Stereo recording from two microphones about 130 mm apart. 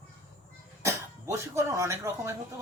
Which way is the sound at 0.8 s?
20° right (ahead or behind).